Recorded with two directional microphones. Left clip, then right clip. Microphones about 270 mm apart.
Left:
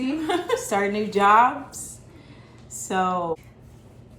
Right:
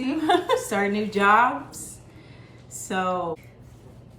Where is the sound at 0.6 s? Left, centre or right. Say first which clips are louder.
Left 1 dB; centre.